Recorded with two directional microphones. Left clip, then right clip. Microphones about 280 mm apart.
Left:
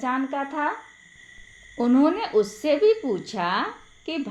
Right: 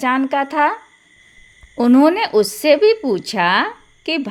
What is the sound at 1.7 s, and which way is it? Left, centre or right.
A woman's voice, right.